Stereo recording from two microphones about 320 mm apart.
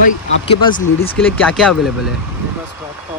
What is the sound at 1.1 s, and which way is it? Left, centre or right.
Speech, centre.